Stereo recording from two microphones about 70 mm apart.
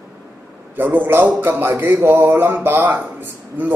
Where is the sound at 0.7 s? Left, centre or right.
Right.